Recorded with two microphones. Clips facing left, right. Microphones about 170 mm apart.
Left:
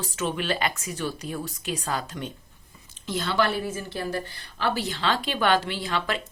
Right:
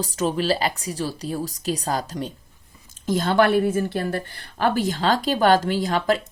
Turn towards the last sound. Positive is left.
turn(degrees=-40)  # may be behind; listen again after turning